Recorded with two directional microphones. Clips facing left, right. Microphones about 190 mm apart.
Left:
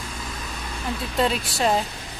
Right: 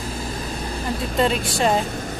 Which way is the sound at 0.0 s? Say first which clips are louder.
Right 6 dB; 35° right (ahead or behind).